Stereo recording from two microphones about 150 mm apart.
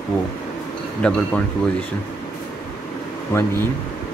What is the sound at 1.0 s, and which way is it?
Speech, 5° left (ahead or behind).